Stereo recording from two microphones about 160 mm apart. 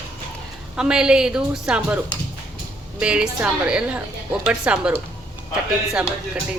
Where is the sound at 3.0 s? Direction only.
5° right (ahead or behind).